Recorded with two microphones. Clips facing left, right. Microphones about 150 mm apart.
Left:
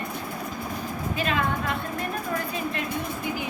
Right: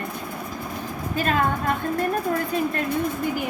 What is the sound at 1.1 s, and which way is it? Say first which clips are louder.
Speech: right 4 dB; 45° right (ahead or behind).